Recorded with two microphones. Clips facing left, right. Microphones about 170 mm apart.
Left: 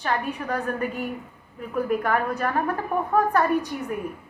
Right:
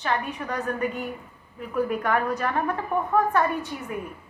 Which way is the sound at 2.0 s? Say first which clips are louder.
Even; 35° left (ahead or behind).